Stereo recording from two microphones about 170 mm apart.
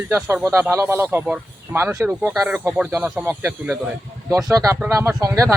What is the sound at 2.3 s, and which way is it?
A man's voice, centre (ahead or behind).